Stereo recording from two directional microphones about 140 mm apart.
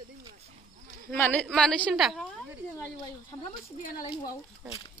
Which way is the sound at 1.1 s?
10° left (ahead or behind).